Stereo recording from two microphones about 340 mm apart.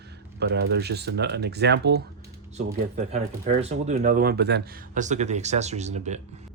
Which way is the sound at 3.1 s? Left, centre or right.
Centre.